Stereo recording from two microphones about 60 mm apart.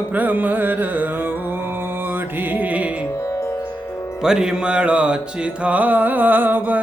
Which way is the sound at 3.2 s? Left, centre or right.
Left.